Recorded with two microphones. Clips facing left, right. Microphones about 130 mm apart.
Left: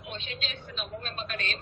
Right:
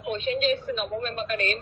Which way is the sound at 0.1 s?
50° right (ahead or behind).